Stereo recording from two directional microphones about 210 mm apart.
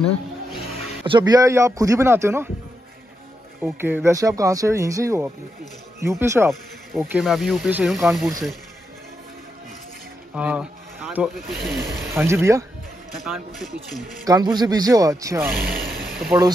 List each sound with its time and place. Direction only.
1.0 s speech: 20° right (ahead or behind)
3.6 s speech: 10° right (ahead or behind)
6.5 s speech: centre (ahead or behind)
10.3 s speech: 5° right (ahead or behind)
12.1 s speech: 10° right (ahead or behind)
13.2 s speech: centre (ahead or behind)
14.2 s speech: 20° right (ahead or behind)